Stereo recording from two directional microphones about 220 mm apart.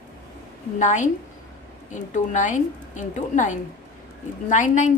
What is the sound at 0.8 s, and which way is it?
A woman's voice, 35° left (ahead or behind).